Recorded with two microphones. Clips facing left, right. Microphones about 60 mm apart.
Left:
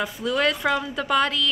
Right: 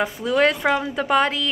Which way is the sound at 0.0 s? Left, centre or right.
Right.